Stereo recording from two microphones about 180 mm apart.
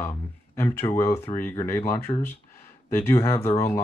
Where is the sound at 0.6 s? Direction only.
15° left (ahead or behind).